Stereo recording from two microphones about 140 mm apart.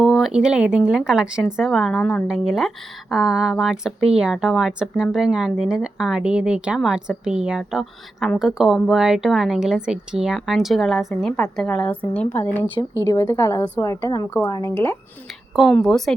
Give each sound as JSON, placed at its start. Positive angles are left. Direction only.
{"t": 0.0, "sound": "speech", "side_deg": 0}
{"t": 2.2, "sound": "a woman's voice", "side_deg": -5}
{"t": 15.5, "sound": "speech", "side_deg": 0}